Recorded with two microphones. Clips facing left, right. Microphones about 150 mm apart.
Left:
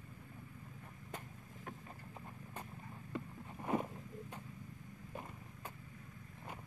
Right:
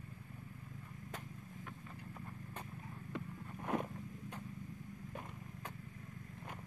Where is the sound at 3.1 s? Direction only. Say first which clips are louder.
Left 1 dB; 5° left (ahead or behind).